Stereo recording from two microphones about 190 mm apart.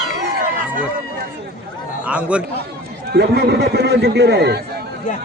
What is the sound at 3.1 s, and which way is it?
Speech, 60° right (ahead or behind).